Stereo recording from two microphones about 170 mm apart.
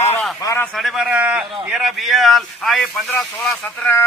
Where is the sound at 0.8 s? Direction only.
Centre (ahead or behind).